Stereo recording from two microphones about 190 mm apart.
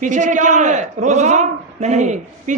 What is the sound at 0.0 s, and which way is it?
A man's voice, 40° right (ahead or behind).